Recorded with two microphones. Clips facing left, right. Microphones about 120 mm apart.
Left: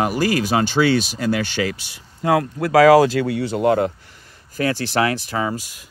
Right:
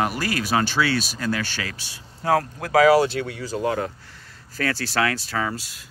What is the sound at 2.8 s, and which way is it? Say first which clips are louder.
Speech: left 6 dB; 90° left.